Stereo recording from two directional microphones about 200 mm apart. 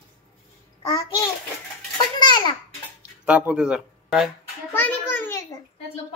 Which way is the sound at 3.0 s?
5° right (ahead or behind).